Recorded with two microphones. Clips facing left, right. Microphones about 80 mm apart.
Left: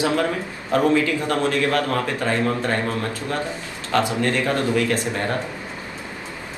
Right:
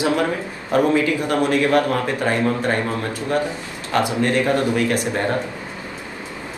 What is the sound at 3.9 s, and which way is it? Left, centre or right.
A man's voice, right.